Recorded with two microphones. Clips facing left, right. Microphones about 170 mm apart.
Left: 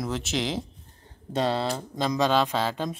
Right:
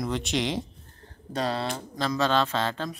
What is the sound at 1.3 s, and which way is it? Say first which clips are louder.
Speech: left 3 dB; 25° left (ahead or behind).